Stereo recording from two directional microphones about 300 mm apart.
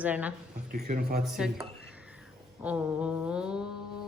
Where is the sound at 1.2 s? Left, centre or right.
Centre.